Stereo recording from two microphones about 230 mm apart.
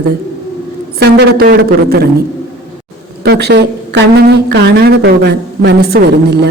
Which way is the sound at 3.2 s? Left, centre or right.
Right.